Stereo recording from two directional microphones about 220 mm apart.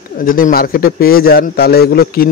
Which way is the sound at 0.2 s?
40° left (ahead or behind).